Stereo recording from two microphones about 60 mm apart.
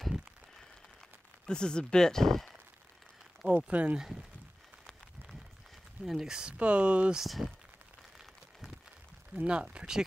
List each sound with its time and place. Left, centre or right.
0.0 s applause: centre
1.4 s speech: centre
3.4 s speech: centre
4.0 s speech: centre
6.0 s speech: centre
7.2 s speech: centre
9.4 s speech: centre